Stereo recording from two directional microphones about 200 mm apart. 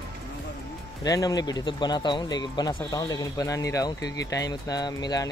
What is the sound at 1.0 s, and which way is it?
Speech, 20° left (ahead or behind).